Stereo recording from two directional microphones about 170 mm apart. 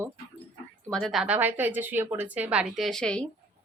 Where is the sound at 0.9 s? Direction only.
5° left (ahead or behind).